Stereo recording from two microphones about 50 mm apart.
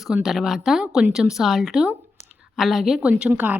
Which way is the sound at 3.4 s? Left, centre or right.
Right.